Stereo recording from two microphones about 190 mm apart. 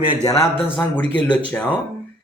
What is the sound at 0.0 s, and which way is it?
Speech, 25° left (ahead or behind).